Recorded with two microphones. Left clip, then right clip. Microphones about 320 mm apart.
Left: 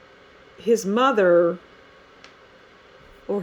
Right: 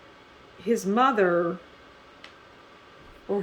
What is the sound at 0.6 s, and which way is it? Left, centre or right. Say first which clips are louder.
Speech: left 3 dB; left.